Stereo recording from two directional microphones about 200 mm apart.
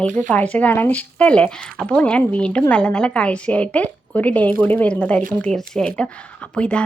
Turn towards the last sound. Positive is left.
turn(degrees=5)  # may be behind; listen again after turning